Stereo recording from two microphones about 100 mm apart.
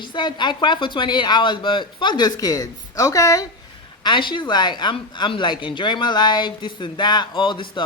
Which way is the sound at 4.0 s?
50° left (ahead or behind).